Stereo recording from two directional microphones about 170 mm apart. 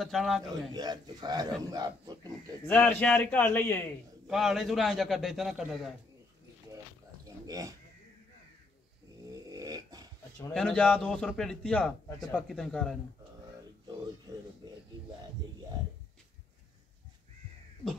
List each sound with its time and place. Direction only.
0.0 s a man's voice: centre (ahead or behind)
0.7 s a man's voice: 25° right (ahead or behind)
2.6 s a man's voice: 10° left (ahead or behind)
4.3 s a man's voice: centre (ahead or behind)
7.2 s a sound: 20° right (ahead or behind)
9.3 s dog: 20° right (ahead or behind)
10.5 s a man's voice: 5° left (ahead or behind)